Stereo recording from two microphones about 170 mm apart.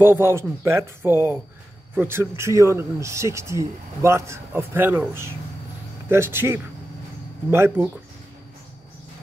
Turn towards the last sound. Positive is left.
turn(degrees=-15)  # may be behind; listen again after turning